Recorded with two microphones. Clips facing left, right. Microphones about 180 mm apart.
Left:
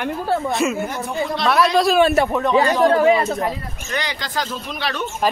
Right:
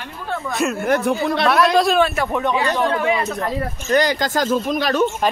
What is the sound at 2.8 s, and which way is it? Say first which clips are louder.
Speech: left 5 dB; 35° left (ahead or behind).